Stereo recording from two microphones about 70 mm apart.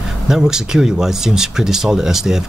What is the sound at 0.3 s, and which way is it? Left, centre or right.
Speech, centre.